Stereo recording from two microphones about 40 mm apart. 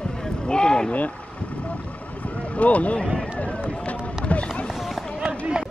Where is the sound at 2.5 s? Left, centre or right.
Left.